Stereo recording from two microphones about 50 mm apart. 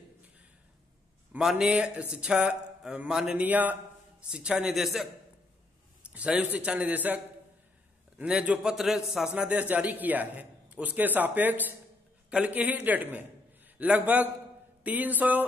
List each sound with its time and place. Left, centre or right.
1.4 s a man's voice: centre
1.7 s a man's voice: right
3.3 s a man's voice: right
4.3 s speech: centre
4.7 s a man's voice: centre
6.0 s a man's voice: right
8.4 s speech: right
8.7 s a man's voice: centre
9.3 s a man's voice: right